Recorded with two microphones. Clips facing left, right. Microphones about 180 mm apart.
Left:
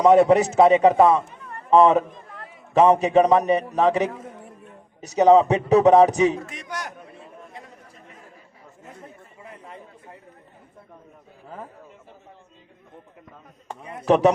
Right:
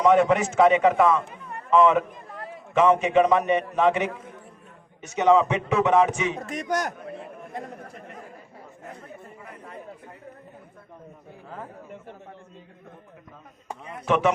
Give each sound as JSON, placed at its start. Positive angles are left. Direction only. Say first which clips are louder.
{"t": 0.0, "sound": "a man's voice", "louder": "left 4 dB", "side_deg": 35}
{"t": 6.5, "sound": "a man's voice", "louder": "right 7 dB", "side_deg": -45}
{"t": 7.2, "sound": "chatter", "louder": "right 6 dB", "side_deg": -55}
{"t": 14.1, "sound": "a man's voice", "louder": "left 5 dB", "side_deg": 35}